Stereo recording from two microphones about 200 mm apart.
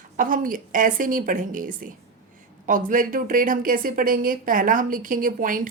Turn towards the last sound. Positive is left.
turn(degrees=-40)  # may be behind; listen again after turning